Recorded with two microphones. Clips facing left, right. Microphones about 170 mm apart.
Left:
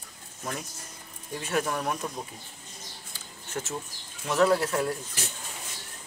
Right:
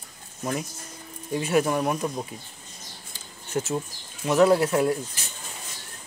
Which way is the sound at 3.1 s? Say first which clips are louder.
Right 7 dB; 15° right (ahead or behind).